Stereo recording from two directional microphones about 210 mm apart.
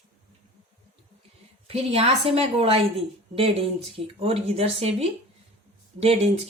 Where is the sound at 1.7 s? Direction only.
30° right (ahead or behind).